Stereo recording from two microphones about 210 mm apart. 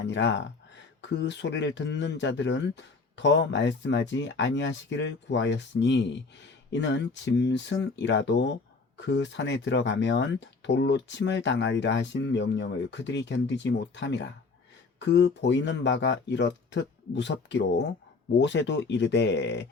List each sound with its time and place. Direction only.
0.0 s speech: 55° left (ahead or behind)